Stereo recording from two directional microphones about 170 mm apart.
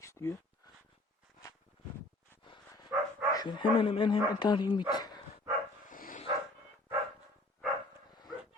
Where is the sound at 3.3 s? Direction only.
25° left (ahead or behind).